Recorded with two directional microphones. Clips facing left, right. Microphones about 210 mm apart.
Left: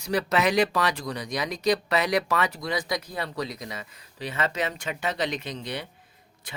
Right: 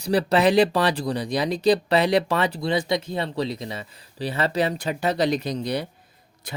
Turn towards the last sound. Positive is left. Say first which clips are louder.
# right 6 dB
turn(degrees=-40)  # may be behind; listen again after turning